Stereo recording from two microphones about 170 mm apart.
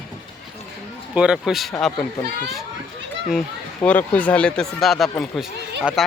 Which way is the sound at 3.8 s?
10° left (ahead or behind).